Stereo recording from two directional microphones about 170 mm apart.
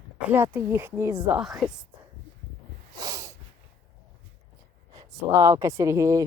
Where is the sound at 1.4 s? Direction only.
Centre (ahead or behind).